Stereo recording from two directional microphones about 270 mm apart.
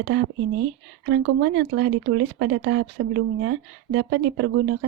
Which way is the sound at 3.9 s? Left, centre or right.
Right.